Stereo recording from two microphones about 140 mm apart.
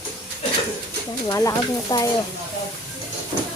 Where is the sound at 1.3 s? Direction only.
25° left (ahead or behind).